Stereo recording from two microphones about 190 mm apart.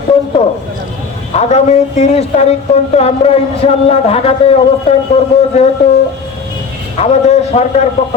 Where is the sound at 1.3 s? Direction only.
35° left (ahead or behind).